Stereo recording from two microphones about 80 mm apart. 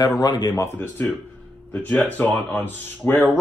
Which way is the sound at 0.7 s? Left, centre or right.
Left.